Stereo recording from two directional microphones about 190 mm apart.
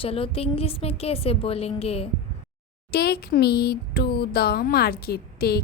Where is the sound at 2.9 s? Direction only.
55° left (ahead or behind).